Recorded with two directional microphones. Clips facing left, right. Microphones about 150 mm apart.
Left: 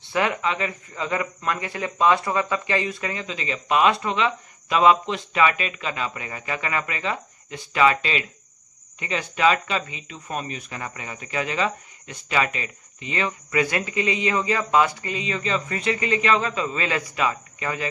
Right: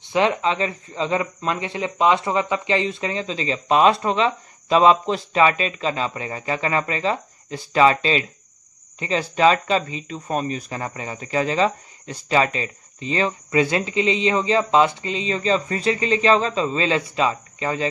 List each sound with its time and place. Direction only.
0.0 s speech: 20° right (ahead or behind)